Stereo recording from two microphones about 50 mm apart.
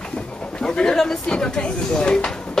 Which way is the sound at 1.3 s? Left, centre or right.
Centre.